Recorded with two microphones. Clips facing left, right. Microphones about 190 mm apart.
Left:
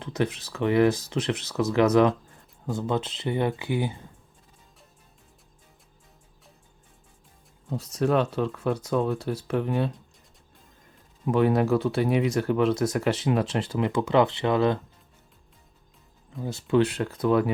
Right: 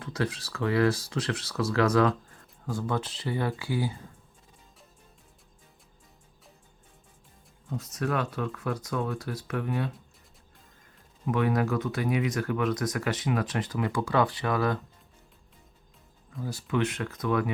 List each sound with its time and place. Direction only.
0.0 s speech: 20° left (ahead or behind)
7.7 s speech: 30° left (ahead or behind)
11.3 s speech: 30° left (ahead or behind)
16.4 s speech: 25° left (ahead or behind)